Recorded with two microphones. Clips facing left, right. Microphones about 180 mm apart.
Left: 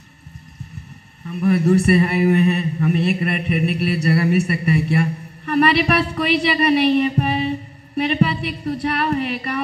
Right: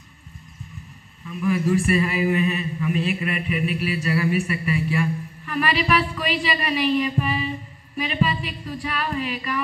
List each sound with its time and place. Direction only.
1.2 s a man's voice: 65° left (ahead or behind)